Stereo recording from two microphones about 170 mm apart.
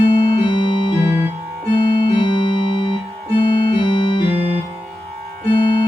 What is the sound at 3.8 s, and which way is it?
Music, 30° left (ahead or behind).